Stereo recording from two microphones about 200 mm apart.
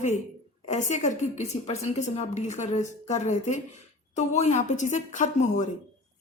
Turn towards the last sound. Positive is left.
turn(degrees=35)  # may be behind; listen again after turning